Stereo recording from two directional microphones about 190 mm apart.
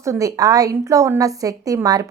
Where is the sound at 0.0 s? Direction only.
15° right (ahead or behind).